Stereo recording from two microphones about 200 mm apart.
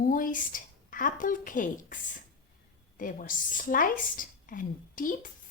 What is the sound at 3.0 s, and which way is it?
Speech, 45° left (ahead or behind).